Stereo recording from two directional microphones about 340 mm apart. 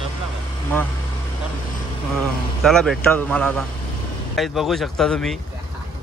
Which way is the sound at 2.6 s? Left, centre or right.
Centre.